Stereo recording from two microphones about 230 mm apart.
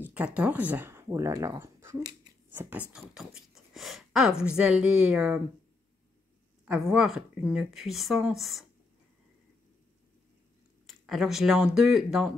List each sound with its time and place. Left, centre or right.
0.0 s speech: centre
6.6 s speech: centre
10.9 s speech: centre